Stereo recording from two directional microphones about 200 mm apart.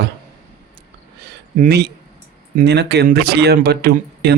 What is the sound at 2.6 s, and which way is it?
Speech, 55° right (ahead or behind).